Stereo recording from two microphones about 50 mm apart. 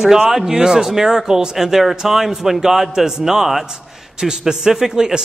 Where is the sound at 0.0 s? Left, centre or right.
Centre.